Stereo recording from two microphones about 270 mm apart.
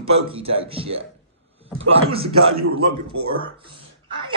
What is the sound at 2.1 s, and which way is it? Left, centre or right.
A man's voice, right.